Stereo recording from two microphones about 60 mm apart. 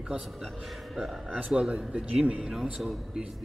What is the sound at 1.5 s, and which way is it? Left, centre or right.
Speech, centre.